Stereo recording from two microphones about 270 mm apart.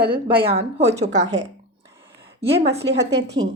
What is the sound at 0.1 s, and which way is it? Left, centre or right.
Speech, centre.